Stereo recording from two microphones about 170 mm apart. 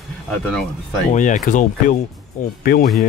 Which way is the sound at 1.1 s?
45° left (ahead or behind).